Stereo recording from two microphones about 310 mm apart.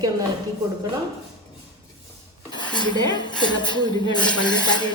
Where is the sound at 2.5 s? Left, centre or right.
Centre.